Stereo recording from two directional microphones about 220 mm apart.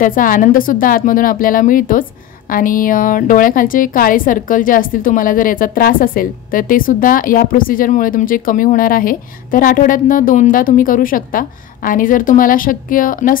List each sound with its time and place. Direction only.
0.0 s a woman's voice: 40° left (ahead or behind)